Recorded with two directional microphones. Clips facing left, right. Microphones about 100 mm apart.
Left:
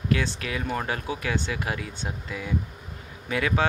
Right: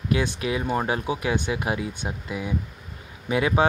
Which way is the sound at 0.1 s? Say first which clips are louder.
Right 3 dB; 20° right (ahead or behind).